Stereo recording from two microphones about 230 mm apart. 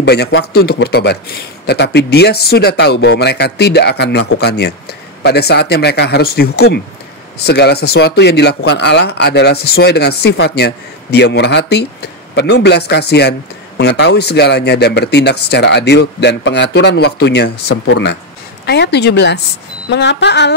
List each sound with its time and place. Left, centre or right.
0.0 s speech: left